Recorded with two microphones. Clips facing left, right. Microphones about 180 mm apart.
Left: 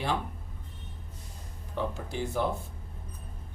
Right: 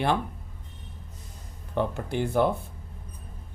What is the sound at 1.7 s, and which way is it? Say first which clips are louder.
Speech: right 5 dB; 60° right (ahead or behind).